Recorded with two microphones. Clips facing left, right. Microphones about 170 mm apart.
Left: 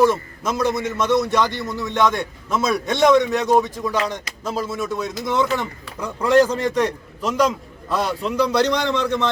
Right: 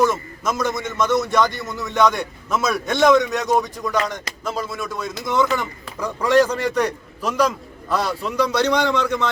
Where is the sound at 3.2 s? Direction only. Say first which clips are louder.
Left 2 dB; 30° left (ahead or behind).